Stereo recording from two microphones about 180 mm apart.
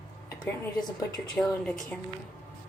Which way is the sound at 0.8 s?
20° left (ahead or behind).